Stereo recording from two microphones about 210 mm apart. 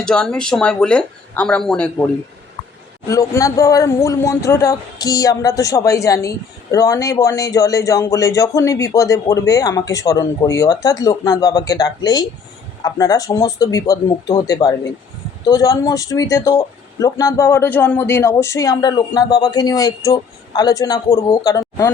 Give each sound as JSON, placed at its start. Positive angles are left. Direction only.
{"t": 0.0, "sound": "speech", "side_deg": 5}
{"t": 3.1, "sound": "speech", "side_deg": 15}